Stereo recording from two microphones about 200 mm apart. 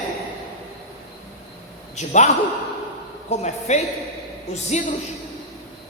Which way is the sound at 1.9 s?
35° left (ahead or behind).